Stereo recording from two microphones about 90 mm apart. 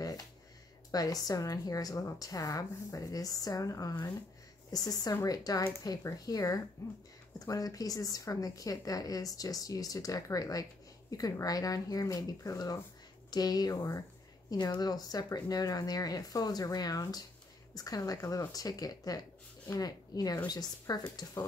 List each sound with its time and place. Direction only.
0.9 s a woman's voice: 45° left (ahead or behind)
13.7 s speech: 30° left (ahead or behind)
14.5 s a woman's voice: 45° left (ahead or behind)